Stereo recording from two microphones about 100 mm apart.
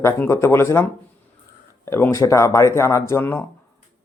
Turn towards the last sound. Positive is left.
turn(degrees=25)  # may be behind; listen again after turning